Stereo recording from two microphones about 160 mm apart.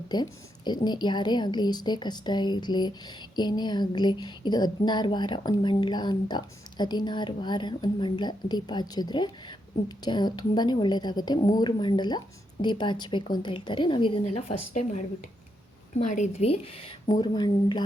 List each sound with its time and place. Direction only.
0.1 s a woman's voice: 25° left (ahead or behind)
17.1 s speech: 25° left (ahead or behind)